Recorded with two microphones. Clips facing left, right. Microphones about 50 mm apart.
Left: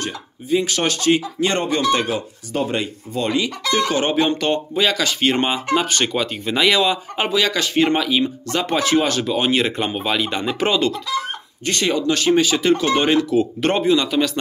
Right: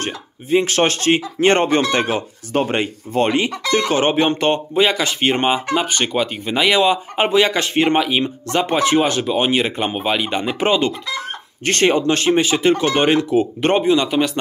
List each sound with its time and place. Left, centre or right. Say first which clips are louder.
0.0 s speech: right 2 dB; right; by 6.8 s centre
6.8 s speech: right 3 dB; right
11.8 s speech: right 3 dB; right